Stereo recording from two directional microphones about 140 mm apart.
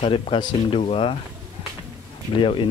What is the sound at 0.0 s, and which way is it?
Speech, 40° left (ahead or behind).